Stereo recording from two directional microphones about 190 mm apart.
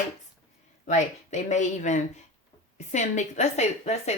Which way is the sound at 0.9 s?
40° left (ahead or behind).